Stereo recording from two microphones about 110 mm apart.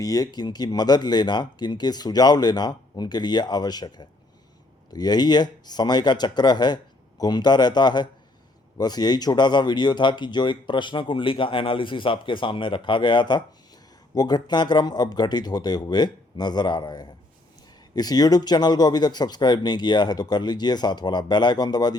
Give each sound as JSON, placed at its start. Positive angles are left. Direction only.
{"t": 0.0, "sound": "speech", "side_deg": 35}